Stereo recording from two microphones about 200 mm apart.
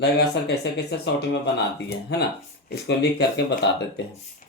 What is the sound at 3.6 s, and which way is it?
Speech, 55° left (ahead or behind).